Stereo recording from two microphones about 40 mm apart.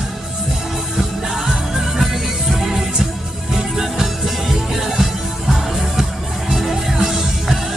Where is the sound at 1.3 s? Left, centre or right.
Centre.